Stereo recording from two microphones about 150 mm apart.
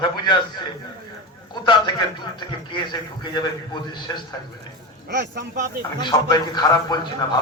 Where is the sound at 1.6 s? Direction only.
30° left (ahead or behind).